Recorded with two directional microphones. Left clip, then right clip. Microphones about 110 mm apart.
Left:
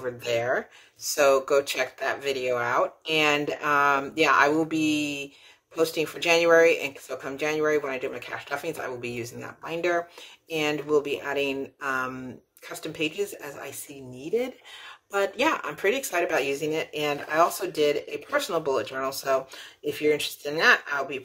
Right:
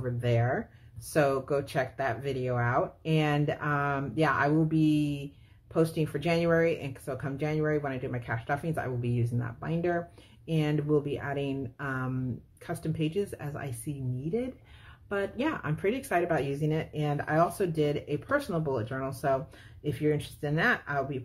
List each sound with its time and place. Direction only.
0.0 s speech: 20° left (ahead or behind)
15.1 s speech: 20° left (ahead or behind)